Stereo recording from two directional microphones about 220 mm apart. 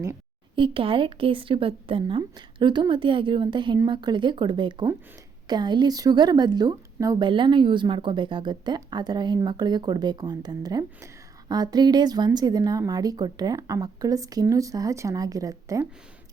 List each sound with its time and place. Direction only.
0.5 s a woman's voice: 25° right (ahead or behind)